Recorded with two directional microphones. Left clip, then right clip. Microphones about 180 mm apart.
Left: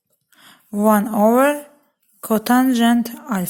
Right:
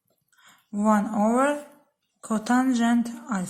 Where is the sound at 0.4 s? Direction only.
45° left (ahead or behind).